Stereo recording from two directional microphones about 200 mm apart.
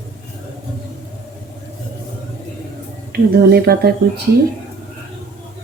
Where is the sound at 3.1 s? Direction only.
50° right (ahead or behind).